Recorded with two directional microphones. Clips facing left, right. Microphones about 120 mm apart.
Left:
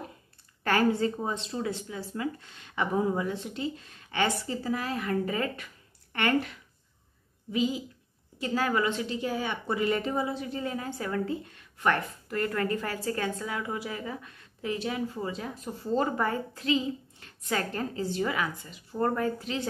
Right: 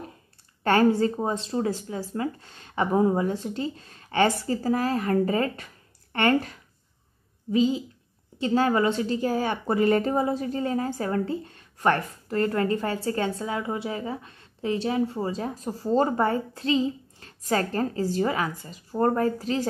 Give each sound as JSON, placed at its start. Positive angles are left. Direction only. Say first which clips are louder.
{"t": 0.7, "sound": "a woman's voice", "louder": "right 5 dB", "side_deg": -35}